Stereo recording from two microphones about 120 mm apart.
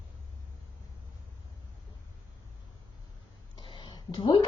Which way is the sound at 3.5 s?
40° left (ahead or behind).